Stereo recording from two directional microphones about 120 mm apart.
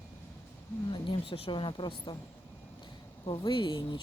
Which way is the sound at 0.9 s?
45° left (ahead or behind).